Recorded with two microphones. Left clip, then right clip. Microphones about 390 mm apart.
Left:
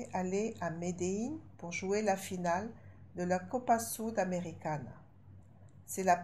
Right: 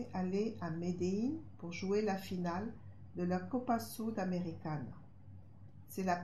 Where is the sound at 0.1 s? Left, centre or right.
Left.